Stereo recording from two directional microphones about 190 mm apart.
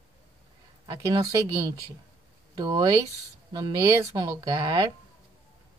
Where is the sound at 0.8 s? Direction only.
15° right (ahead or behind).